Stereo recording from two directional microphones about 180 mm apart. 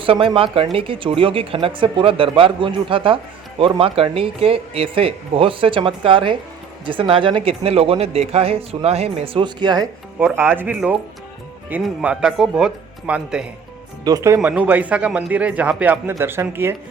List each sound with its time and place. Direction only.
0.0 s speech: 30° right (ahead or behind)
10.2 s speech: 10° right (ahead or behind)
14.0 s speech: 20° right (ahead or behind)